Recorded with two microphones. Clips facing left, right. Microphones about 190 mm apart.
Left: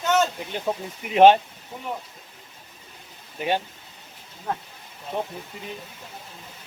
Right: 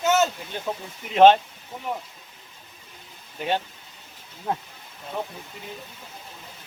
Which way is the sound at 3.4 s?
10° left (ahead or behind).